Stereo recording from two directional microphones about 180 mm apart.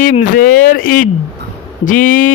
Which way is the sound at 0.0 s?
50° left (ahead or behind).